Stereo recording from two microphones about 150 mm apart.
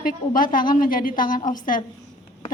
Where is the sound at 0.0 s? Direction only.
65° left (ahead or behind).